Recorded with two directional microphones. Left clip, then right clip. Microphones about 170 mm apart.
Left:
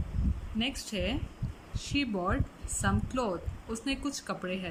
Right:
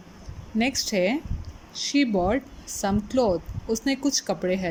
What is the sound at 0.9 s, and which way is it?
Speech, 25° right (ahead or behind).